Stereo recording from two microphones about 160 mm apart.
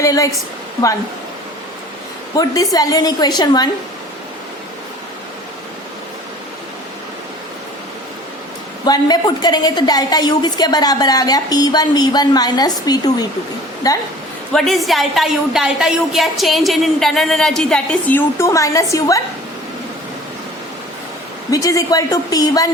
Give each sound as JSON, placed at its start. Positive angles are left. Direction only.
{"t": 0.0, "sound": "a woman's voice", "side_deg": 20}
{"t": 2.3, "sound": "a woman's voice", "side_deg": 25}
{"t": 8.8, "sound": "a woman's voice", "side_deg": 25}
{"t": 14.5, "sound": "a woman's voice", "side_deg": 0}
{"t": 21.5, "sound": "a woman's voice", "side_deg": 20}